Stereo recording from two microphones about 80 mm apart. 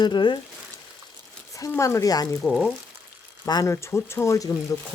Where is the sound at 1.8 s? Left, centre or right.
Left.